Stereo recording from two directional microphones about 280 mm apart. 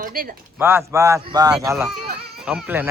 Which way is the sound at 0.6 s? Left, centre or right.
Centre.